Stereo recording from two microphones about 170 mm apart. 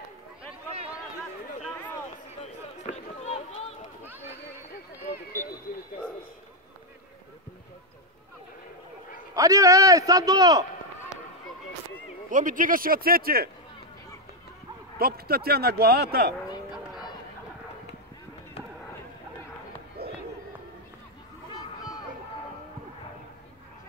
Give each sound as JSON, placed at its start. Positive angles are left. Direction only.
{"t": 2.8, "sound": "run", "side_deg": 40}
{"t": 4.0, "sound": "run", "side_deg": -10}
{"t": 9.3, "sound": "a man's voice", "side_deg": -20}
{"t": 12.3, "sound": "speech", "side_deg": -50}
{"t": 15.0, "sound": "speech", "side_deg": -65}
{"t": 20.0, "sound": "a sound", "side_deg": -65}